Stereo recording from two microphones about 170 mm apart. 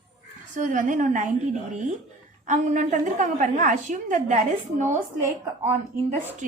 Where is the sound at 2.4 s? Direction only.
45° right (ahead or behind).